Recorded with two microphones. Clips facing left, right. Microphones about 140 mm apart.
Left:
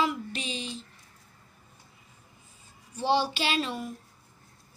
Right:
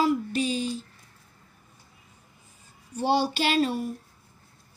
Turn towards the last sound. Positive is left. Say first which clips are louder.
# right 5 dB
turn(degrees=-40)  # may be behind; listen again after turning